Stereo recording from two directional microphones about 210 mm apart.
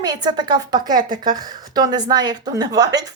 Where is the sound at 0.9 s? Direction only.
40° right (ahead or behind).